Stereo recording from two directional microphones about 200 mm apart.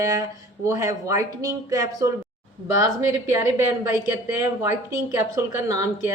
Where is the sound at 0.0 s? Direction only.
15° right (ahead or behind).